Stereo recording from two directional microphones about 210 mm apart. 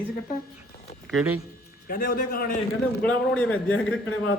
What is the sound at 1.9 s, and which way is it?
Speech, 45° left (ahead or behind).